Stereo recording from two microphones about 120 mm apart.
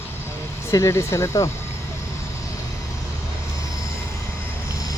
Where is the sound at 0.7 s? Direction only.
25° left (ahead or behind).